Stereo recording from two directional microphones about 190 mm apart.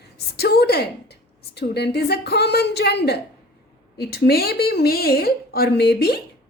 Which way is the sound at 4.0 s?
55° left (ahead or behind).